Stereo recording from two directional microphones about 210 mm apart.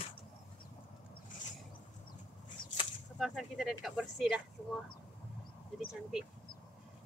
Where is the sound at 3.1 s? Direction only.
Centre (ahead or behind).